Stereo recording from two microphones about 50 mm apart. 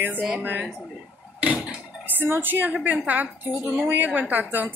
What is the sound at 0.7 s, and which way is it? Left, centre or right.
Speech, centre.